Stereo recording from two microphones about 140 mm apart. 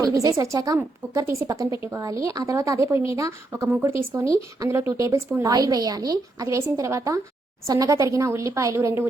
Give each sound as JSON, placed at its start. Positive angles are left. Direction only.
{"t": 0.0, "sound": "speech", "side_deg": -25}